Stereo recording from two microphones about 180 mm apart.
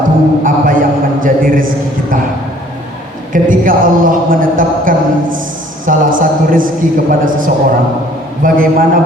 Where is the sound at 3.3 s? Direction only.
50° right (ahead or behind).